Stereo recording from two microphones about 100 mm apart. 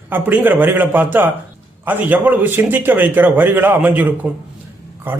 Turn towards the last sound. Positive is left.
turn(degrees=-20)  # may be behind; listen again after turning